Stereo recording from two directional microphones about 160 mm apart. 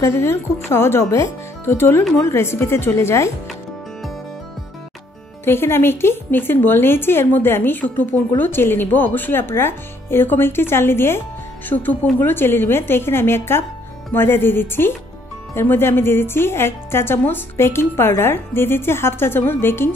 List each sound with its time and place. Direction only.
0.0 s speech: 15° left (ahead or behind)
5.4 s speech: 15° left (ahead or behind)